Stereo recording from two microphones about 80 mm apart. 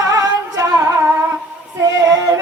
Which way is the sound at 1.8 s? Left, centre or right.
Right.